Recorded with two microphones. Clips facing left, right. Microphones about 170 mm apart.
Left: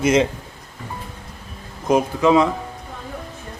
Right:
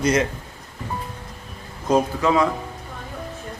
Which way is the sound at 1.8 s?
20° left (ahead or behind).